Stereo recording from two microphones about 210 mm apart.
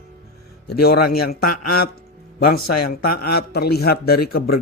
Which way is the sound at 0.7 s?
50° left (ahead or behind).